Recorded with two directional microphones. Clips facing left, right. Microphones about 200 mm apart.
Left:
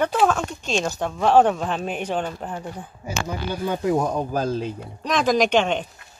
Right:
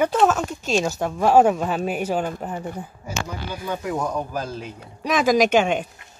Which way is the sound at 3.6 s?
30° left (ahead or behind).